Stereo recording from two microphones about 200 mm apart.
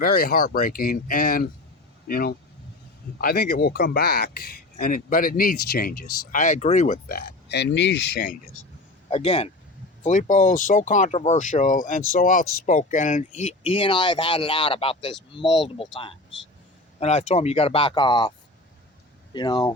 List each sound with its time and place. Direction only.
0.0 s speech: 45° left (ahead or behind)
9.0 s speech: 30° left (ahead or behind)